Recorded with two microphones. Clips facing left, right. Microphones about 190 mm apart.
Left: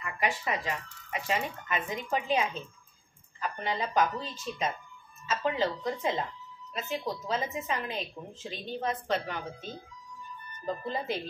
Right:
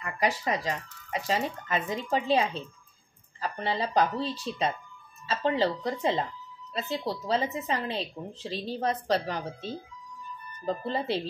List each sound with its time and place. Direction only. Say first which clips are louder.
0.0 s a woman's voice: right 3 dB; 40° right (ahead or behind)